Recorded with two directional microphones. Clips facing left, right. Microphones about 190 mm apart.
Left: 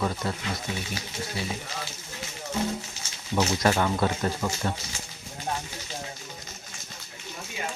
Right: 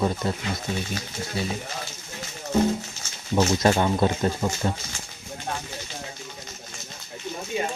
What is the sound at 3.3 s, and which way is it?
Speech, 25° right (ahead or behind).